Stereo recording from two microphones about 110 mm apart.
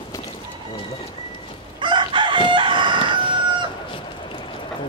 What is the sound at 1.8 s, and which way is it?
Chicken, 45° right (ahead or behind).